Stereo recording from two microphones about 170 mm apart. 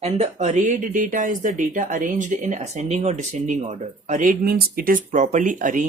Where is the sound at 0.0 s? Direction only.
40° right (ahead or behind).